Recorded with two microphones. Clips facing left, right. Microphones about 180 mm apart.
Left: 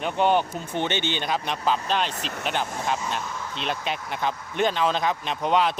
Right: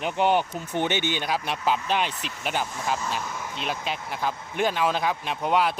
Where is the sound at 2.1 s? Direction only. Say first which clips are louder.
Left 3 dB; 50° left (ahead or behind).